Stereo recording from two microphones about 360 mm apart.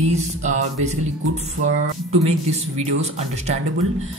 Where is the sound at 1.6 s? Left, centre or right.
Centre.